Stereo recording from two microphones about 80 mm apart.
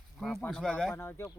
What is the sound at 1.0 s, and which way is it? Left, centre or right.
Speech, left.